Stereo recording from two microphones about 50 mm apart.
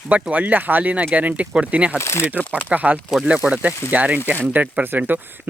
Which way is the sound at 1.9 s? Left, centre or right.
Left.